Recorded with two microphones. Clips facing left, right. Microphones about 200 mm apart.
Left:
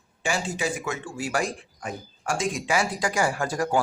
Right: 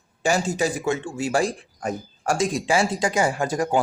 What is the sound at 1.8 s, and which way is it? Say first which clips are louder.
Speech: right 8 dB; 40° right (ahead or behind).